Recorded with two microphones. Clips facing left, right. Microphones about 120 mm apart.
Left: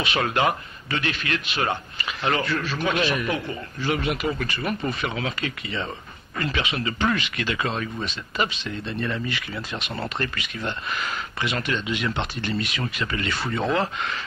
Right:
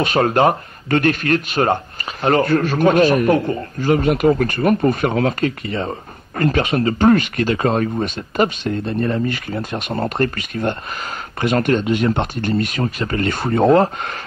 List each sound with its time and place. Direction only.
0.0 s a man's voice: 45° right (ahead or behind)